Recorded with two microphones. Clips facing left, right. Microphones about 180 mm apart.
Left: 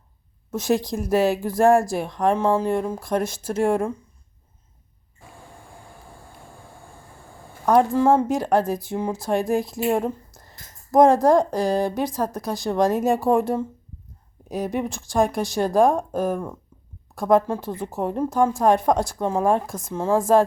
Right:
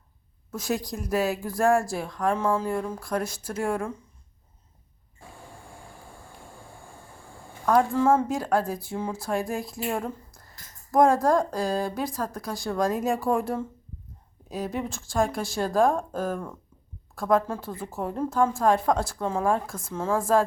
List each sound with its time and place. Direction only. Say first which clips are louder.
0.5 s speech: left 7 dB; 25° left (ahead or behind)
7.7 s a woman's voice: left 4 dB; 20° left (ahead or behind)